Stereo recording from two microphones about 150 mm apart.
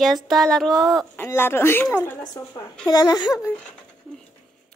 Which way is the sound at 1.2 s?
15° left (ahead or behind).